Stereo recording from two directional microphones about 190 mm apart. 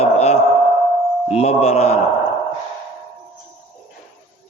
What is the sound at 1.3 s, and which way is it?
Speech, 35° left (ahead or behind).